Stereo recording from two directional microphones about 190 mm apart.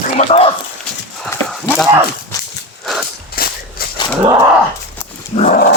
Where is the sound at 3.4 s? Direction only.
50° left (ahead or behind).